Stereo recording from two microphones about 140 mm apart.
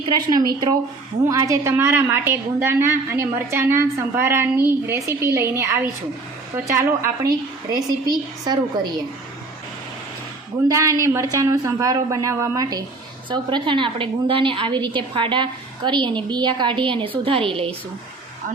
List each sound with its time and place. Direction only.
0.1 s a woman's voice: 30° right (ahead or behind)
10.7 s a woman's voice: 25° right (ahead or behind)
13.3 s a woman's voice: 35° right (ahead or behind)